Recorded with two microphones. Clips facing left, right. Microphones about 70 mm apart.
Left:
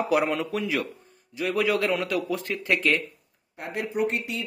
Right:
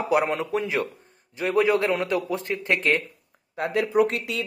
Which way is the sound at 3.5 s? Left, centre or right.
Right.